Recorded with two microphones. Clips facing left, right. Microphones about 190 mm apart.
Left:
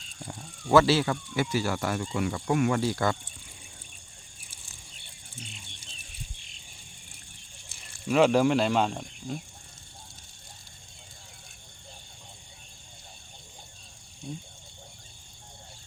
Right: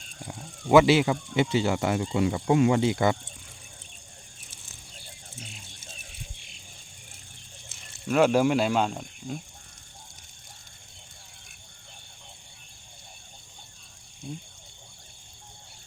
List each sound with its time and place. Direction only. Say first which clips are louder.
0.7 s speech: right 3 dB; 15° right (ahead or behind)
8.0 s speech: even; centre (ahead or behind)
14.2 s speech: even; centre (ahead or behind)